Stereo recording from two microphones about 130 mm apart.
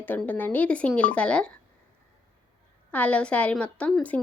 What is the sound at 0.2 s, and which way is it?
Speech, 15° left (ahead or behind).